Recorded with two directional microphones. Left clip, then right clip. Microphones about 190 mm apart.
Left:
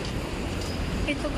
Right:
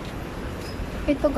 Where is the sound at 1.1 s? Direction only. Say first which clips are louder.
Right 6 dB; 25° right (ahead or behind).